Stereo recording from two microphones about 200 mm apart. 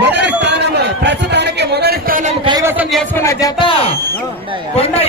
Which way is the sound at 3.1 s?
15° left (ahead or behind).